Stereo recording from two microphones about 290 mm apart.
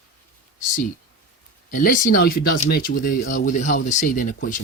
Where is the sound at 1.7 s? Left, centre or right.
Left.